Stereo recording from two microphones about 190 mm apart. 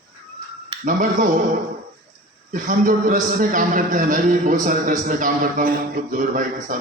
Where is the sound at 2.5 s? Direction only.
45° right (ahead or behind).